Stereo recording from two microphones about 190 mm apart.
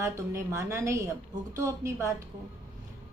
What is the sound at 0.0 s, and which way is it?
A woman's voice, 15° right (ahead or behind).